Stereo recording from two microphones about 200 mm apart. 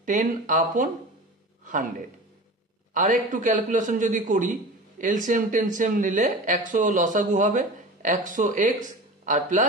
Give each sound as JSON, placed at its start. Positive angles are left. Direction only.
{"t": 0.0, "sound": "a man's voice", "side_deg": -40}